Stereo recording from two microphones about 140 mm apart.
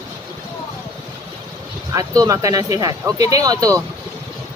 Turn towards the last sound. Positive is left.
turn(degrees=-25)  # may be behind; listen again after turning